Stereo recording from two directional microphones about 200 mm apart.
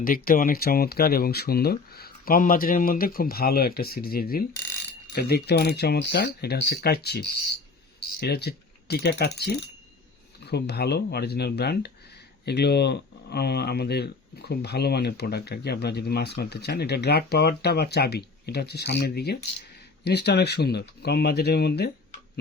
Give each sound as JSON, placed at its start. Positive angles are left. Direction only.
{"t": 0.0, "sound": "speech", "side_deg": 45}